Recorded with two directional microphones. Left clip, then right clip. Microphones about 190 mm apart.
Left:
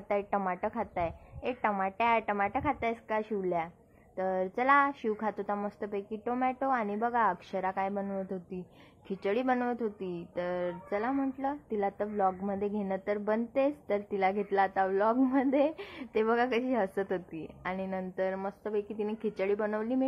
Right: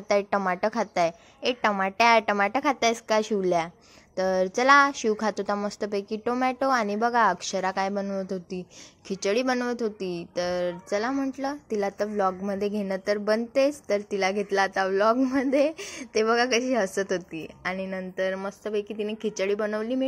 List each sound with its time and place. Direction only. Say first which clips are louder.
0.1 s a woman's voice: right 7 dB; 30° right (ahead or behind)